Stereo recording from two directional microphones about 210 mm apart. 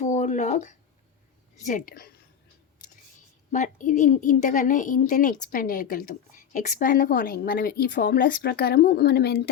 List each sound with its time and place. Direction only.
0.0 s a sound: 35° left (ahead or behind)
1.5 s a woman's voice: 40° left (ahead or behind)
3.5 s a woman's voice: 35° left (ahead or behind)